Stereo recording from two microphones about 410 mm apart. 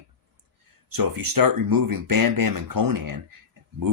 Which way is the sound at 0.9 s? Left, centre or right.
Right.